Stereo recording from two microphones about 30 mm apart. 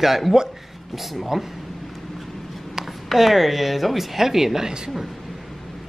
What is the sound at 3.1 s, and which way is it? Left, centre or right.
Speech, centre.